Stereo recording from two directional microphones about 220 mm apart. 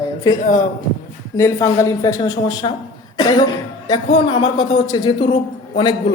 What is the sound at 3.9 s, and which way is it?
A woman's voice, 20° left (ahead or behind).